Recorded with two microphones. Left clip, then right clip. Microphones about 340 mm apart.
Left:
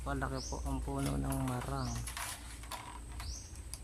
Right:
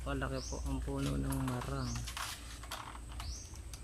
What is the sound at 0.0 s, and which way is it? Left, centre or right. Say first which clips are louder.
Speech: left 1 dB; centre.